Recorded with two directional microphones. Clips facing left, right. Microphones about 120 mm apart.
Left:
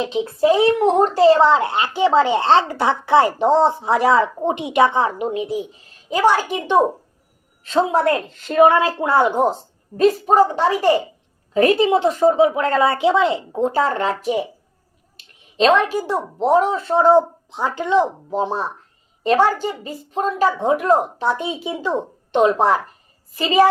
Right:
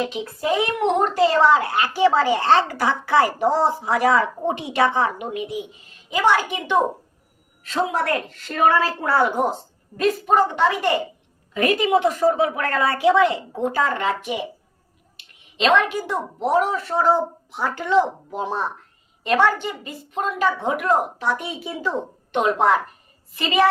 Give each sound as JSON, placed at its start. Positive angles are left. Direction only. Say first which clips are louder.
{"t": 0.0, "sound": "a child's voice", "louder": "left 7 dB", "side_deg": 25}